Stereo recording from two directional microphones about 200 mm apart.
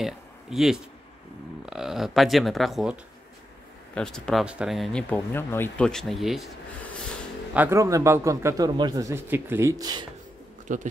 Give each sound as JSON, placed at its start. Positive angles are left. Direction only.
{"t": 0.0, "sound": "speech", "side_deg": 0}
{"t": 7.5, "sound": "speech", "side_deg": -10}
{"t": 10.7, "sound": "speech", "side_deg": -40}